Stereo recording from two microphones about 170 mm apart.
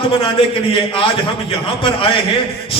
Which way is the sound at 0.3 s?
30° left (ahead or behind).